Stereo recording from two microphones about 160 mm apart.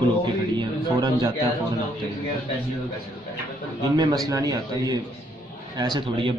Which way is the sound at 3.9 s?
25° right (ahead or behind).